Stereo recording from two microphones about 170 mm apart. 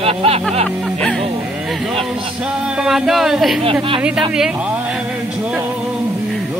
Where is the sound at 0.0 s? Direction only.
35° right (ahead or behind).